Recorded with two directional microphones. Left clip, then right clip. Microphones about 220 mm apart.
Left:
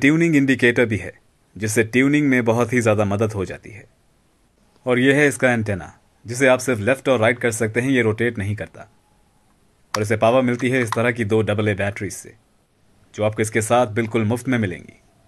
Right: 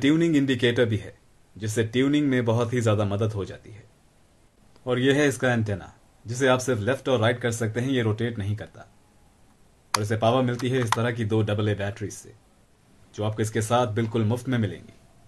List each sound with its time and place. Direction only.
0.0 s speech: 40° left (ahead or behind)
4.8 s speech: 40° left (ahead or behind)
10.0 s speech: 40° left (ahead or behind)